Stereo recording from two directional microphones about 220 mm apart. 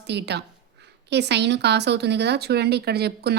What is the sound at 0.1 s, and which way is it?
A woman's voice, 50° right (ahead or behind).